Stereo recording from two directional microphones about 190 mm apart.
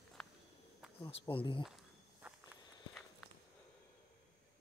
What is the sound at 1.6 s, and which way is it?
Walk, 5° right (ahead or behind).